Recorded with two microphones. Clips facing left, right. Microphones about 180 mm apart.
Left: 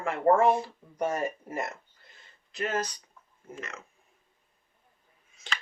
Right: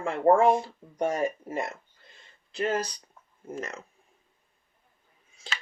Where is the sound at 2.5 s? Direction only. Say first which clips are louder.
Right 3 dB; 30° right (ahead or behind).